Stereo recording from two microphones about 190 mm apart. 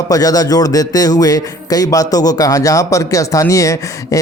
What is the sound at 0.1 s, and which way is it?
Speech, 20° left (ahead or behind).